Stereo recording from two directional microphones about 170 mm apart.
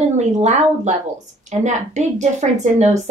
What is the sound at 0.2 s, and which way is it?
Speech, 45° right (ahead or behind).